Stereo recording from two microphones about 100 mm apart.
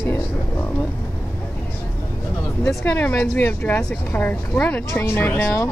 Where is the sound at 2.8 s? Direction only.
15° left (ahead or behind).